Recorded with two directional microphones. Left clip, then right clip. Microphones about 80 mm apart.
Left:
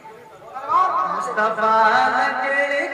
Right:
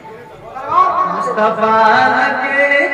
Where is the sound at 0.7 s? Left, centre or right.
Left.